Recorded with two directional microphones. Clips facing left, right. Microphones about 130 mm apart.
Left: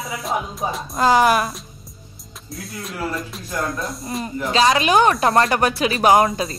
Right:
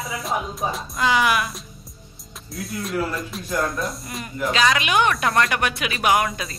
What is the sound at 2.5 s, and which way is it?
Speech, centre (ahead or behind).